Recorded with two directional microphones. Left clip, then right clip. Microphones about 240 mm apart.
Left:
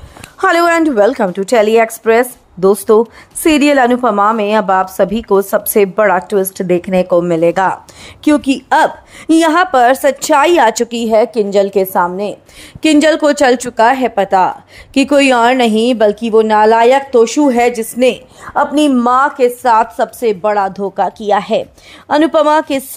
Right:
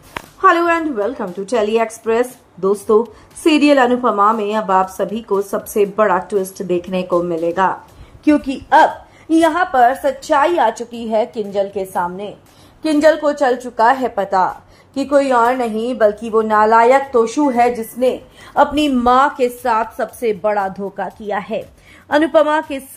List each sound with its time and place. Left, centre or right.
0.4 s a woman's voice: left
13.8 s a woman's voice: left
15.0 s a woman's voice: left
18.5 s a woman's voice: left